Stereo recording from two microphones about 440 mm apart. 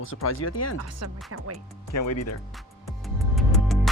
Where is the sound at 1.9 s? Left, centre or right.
Left.